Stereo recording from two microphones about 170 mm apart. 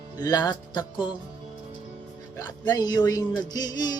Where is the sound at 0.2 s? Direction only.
25° left (ahead or behind).